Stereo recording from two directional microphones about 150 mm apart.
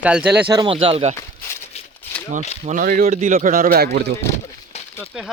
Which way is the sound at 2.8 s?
75° right (ahead or behind).